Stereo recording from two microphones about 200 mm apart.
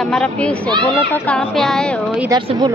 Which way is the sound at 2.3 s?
20° right (ahead or behind).